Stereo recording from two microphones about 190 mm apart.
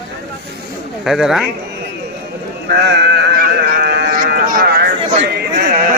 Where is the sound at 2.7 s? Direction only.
65° right (ahead or behind).